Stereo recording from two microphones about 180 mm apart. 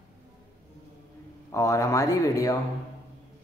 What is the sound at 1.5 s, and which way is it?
Speech, 15° left (ahead or behind).